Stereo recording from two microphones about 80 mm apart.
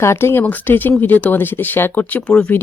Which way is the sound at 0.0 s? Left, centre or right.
Left.